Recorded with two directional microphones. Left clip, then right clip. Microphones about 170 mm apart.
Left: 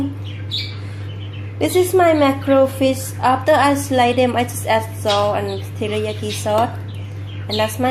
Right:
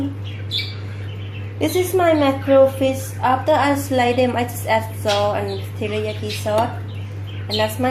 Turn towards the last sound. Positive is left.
turn(degrees=20)  # may be behind; listen again after turning